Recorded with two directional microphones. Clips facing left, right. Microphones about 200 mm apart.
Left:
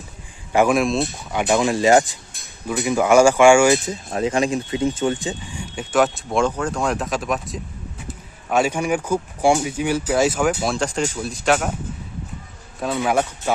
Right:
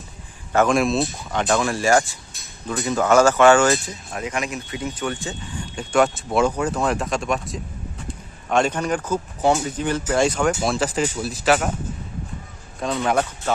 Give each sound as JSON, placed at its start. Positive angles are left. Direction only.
{"t": 0.5, "sound": "speech", "side_deg": 10}
{"t": 0.8, "sound": "speech", "side_deg": 0}
{"t": 4.1, "sound": "speech", "side_deg": 30}
{"t": 12.8, "sound": "speech", "side_deg": 10}